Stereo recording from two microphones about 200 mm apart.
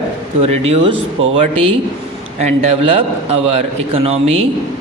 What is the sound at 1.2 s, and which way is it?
Speech, 80° right.